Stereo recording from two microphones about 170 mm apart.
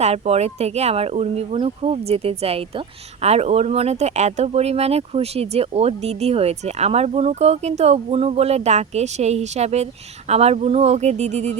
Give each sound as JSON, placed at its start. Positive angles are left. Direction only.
{"t": 0.0, "sound": "speech", "side_deg": -40}